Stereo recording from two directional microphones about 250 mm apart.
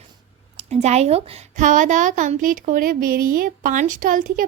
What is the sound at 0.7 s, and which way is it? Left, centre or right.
A woman's voice, right.